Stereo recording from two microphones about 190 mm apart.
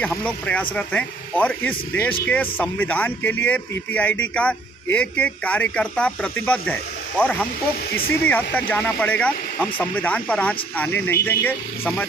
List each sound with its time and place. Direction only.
0.0 s speech: 5° left (ahead or behind)
7.9 s speech: 55° left (ahead or behind)
8.2 s speech: 10° left (ahead or behind)